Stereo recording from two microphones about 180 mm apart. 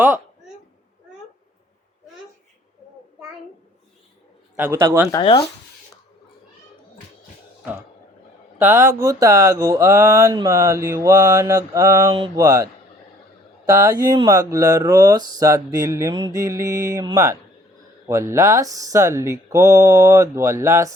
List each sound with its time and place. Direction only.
4.5 s speech: 15° right (ahead or behind)
5.1 s speech: 30° left (ahead or behind)
8.5 s speech: 10° right (ahead or behind)
13.7 s speech: 15° right (ahead or behind)